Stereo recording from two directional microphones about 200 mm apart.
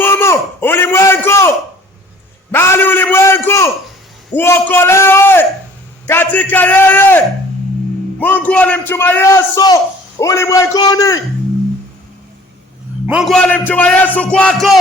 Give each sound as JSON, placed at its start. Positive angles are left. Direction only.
{"t": 0.0, "sound": "a sound", "side_deg": 10}
{"t": 8.2, "sound": "a man's voice", "side_deg": 10}
{"t": 13.1, "sound": "a man's voice", "side_deg": 0}